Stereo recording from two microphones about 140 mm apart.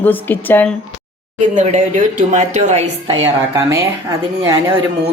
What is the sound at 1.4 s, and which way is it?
Speech, 60° right (ahead or behind).